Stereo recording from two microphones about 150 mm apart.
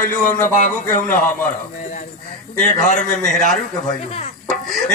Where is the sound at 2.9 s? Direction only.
55° left (ahead or behind).